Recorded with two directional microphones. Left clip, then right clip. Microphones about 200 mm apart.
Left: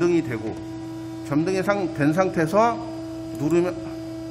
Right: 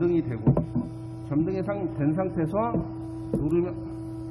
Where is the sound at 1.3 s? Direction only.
30° left (ahead or behind).